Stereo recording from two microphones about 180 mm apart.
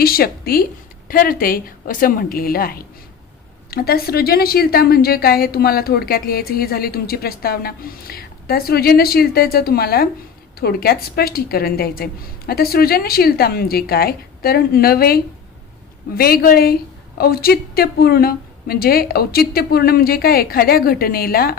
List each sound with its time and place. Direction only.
0.0 s a woman's voice: 55° left (ahead or behind)